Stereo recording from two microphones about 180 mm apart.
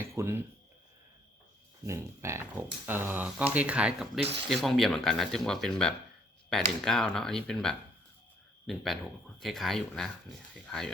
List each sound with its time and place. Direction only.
0.2 s speech: 15° right (ahead or behind)
1.9 s speech: 15° right (ahead or behind)
4.2 s speech: 35° right (ahead or behind)
4.4 s speech: centre (ahead or behind)